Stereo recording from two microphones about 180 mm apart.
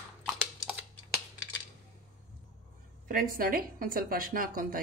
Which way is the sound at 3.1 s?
50° right (ahead or behind).